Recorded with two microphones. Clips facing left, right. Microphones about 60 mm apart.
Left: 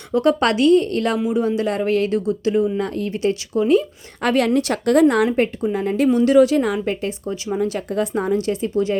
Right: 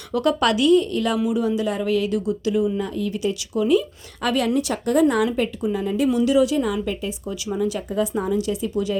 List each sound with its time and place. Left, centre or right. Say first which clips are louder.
0.1 s a woman's voice: left 3 dB; left
1.2 s a woman's voice: left 2 dB; left
1.5 s a woman's voice: left 2 dB; left
2.7 s a woman's voice: left 2 dB; left
3.1 s a woman's voice: left 4 dB; left
6.8 s a woman's voice: left 4 dB; left